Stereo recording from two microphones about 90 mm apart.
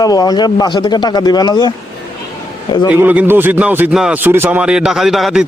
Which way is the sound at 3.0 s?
20° right (ahead or behind).